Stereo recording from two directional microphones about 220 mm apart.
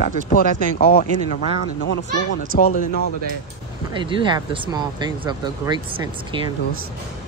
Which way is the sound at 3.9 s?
20° right (ahead or behind).